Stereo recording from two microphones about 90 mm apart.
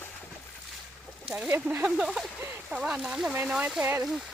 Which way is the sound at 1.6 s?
20° right (ahead or behind).